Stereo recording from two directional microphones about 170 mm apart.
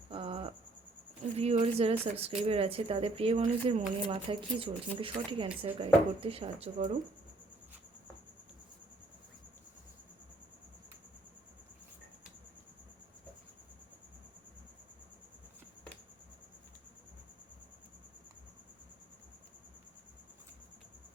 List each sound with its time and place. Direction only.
0.1 s cricket: 35° right (ahead or behind)
1.4 s speech: 35° right (ahead or behind)